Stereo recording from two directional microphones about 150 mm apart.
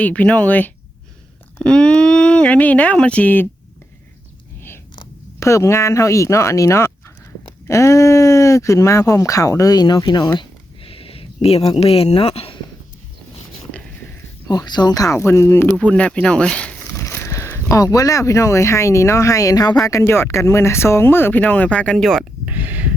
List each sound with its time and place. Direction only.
0.0 s speech: 10° left (ahead or behind)
5.4 s speech: 20° left (ahead or behind)
10.8 s a sound: 40° left (ahead or behind)
11.7 s speech: 40° left (ahead or behind)
14.4 s speech: 25° left (ahead or behind); by 16.9 s 5° left (ahead or behind)
17.0 s speech: 15° left (ahead or behind)
22.4 s speech: 10° right (ahead or behind)